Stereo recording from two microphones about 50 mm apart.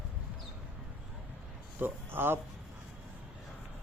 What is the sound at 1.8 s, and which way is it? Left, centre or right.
Speech, right.